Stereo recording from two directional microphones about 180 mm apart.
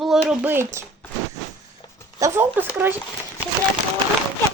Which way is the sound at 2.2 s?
10° right (ahead or behind).